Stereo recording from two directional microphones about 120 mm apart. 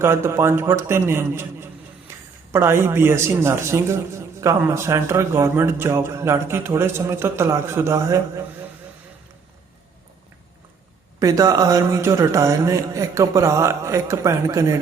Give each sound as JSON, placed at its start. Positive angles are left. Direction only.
{"t": 0.0, "sound": "a man's voice", "side_deg": -20}
{"t": 11.2, "sound": "a man's voice", "side_deg": -30}